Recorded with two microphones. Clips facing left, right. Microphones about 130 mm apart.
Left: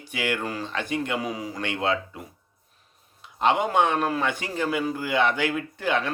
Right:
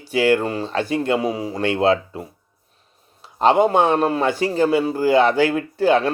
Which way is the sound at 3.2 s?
35° right (ahead or behind).